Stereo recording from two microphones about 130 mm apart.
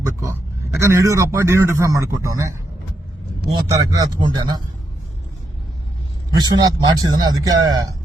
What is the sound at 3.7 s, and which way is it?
Speech, 25° right (ahead or behind).